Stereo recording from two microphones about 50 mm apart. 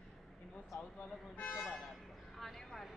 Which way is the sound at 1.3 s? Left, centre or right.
Left.